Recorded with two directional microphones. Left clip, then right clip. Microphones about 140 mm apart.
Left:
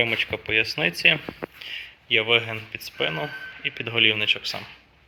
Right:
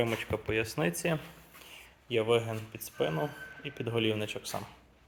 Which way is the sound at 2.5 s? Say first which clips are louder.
Left 8 dB; 15° right (ahead or behind).